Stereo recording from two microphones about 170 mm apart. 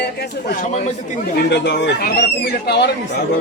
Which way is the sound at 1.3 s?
90° left.